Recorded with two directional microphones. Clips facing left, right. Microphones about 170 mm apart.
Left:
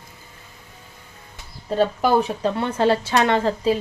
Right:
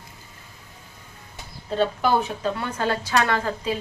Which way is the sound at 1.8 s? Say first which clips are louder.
Left 3 dB; 35° left (ahead or behind).